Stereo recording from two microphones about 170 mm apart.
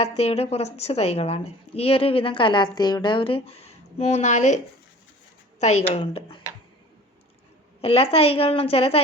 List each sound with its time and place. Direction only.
0.0 s a woman's voice: 40° left (ahead or behind)
7.8 s a woman's voice: 35° left (ahead or behind)